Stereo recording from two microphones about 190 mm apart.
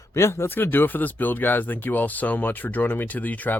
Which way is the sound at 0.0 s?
15° left (ahead or behind).